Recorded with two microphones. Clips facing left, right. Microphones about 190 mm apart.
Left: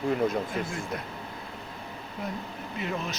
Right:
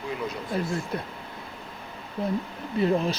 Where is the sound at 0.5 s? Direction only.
35° right (ahead or behind).